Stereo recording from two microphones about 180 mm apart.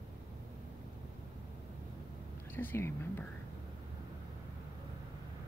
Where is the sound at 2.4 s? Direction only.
10° left (ahead or behind).